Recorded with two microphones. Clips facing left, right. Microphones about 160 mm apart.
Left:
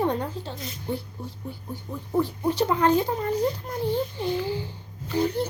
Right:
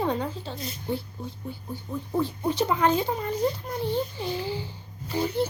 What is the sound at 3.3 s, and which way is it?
Speech, 15° left (ahead or behind).